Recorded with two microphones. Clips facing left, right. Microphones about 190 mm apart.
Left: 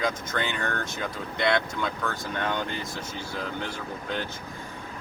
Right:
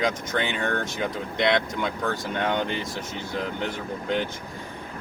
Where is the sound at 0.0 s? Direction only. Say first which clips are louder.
Right 3 dB; 20° right (ahead or behind).